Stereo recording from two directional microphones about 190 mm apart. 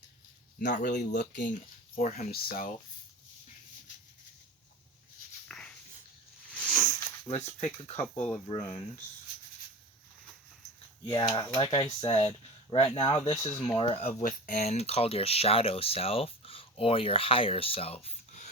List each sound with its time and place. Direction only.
0.6 s speech: 45° left (ahead or behind)
5.5 s dog: 5° left (ahead or behind)
6.5 s a sound: 10° right (ahead or behind)
7.3 s speech: 35° left (ahead or behind)
11.0 s speech: 25° left (ahead or behind)